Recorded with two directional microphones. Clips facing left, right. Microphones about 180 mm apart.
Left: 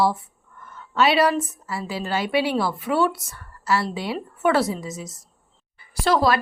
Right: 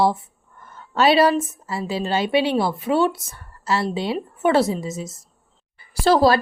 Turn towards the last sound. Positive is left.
turn(degrees=-30)  # may be behind; listen again after turning